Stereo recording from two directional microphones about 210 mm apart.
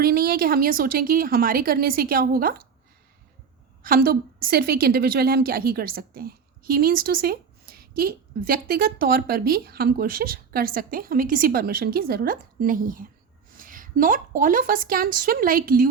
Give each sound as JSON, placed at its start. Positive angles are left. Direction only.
{"t": 0.0, "sound": "a woman's voice", "side_deg": -45}
{"t": 3.8, "sound": "a woman's voice", "side_deg": -45}